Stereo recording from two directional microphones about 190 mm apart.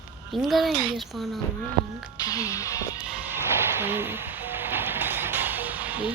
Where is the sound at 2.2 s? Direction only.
20° left (ahead or behind).